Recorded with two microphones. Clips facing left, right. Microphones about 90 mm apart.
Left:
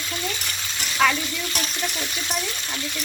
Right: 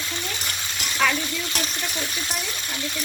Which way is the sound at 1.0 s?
Centre (ahead or behind).